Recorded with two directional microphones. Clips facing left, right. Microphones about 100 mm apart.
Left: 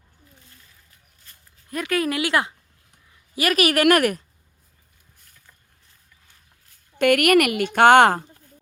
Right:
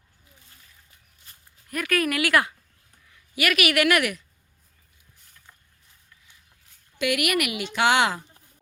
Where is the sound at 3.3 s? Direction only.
35° left (ahead or behind).